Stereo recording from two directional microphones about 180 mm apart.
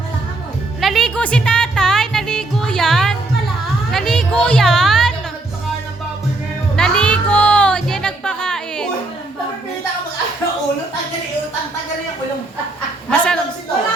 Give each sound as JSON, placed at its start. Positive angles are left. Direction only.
{"t": 0.8, "sound": "music", "side_deg": 0}
{"t": 3.9, "sound": "speech", "side_deg": 5}
{"t": 6.7, "sound": "music", "side_deg": 5}
{"t": 13.1, "sound": "a woman's voice", "side_deg": 5}